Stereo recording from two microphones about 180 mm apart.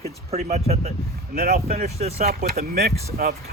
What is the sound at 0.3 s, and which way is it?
Speech, 40° right (ahead or behind).